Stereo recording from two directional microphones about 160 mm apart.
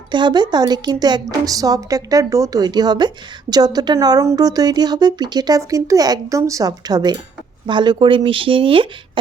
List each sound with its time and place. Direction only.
0.1 s speech: 30° right (ahead or behind)